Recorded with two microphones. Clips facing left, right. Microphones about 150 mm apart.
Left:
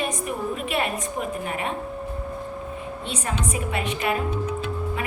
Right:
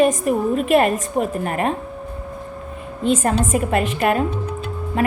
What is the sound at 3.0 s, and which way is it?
A woman's voice, 45° right (ahead or behind).